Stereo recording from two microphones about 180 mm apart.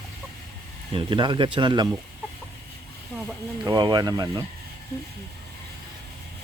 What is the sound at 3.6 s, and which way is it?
Speech, 20° right (ahead or behind).